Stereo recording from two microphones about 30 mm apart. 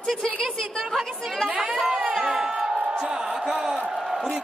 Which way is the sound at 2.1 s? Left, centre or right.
Centre.